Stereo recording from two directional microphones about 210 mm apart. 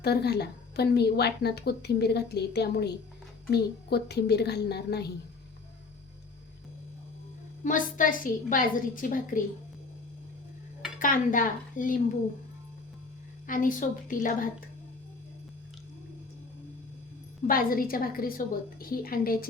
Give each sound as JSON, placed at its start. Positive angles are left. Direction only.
{"t": 0.0, "sound": "a woman's voice", "side_deg": 50}
{"t": 7.6, "sound": "a woman's voice", "side_deg": 40}
{"t": 11.0, "sound": "a woman's voice", "side_deg": 40}
{"t": 13.5, "sound": "a woman's voice", "side_deg": 40}
{"t": 17.4, "sound": "a woman's voice", "side_deg": 45}